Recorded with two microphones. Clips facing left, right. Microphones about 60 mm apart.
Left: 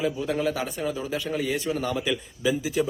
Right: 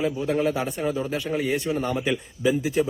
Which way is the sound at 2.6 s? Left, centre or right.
Right.